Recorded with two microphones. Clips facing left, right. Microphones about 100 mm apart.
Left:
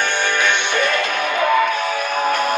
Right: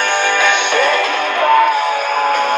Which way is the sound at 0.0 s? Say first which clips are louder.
Right 4 dB; 60° right (ahead or behind).